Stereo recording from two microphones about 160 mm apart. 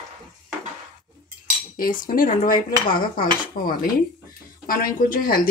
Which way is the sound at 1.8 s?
60° left (ahead or behind).